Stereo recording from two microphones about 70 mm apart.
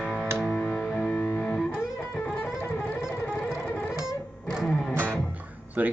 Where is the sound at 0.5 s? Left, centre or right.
Left.